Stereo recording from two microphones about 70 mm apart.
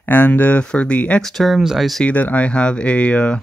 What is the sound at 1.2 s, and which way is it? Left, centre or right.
Speech, centre.